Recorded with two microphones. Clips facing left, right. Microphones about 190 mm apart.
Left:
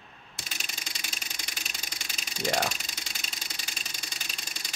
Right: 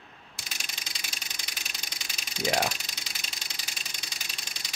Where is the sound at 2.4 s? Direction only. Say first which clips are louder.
Right 1 dB; 5° right (ahead or behind).